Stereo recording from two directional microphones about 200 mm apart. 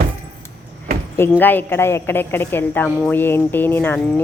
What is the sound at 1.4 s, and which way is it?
A woman's voice, 10° left (ahead or behind).